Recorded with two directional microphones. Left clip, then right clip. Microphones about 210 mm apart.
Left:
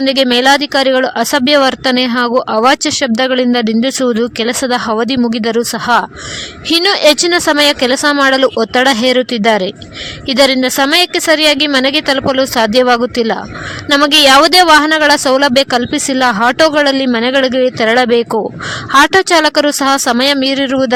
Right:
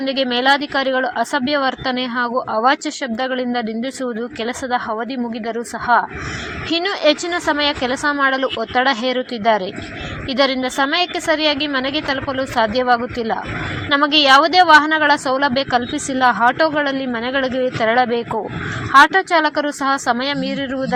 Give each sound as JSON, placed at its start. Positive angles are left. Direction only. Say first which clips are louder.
{"t": 0.0, "sound": "speech", "louder": "left 7 dB", "side_deg": 35}